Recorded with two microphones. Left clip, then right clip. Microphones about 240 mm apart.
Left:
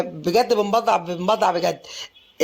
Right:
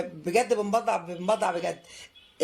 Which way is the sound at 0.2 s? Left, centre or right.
Left.